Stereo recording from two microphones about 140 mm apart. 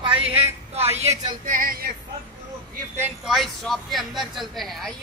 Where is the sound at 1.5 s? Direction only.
85° right.